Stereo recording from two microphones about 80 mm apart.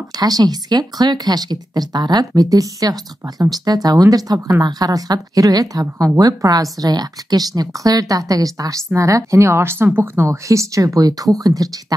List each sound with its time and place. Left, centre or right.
0.2 s speech: right
2.5 s speech: right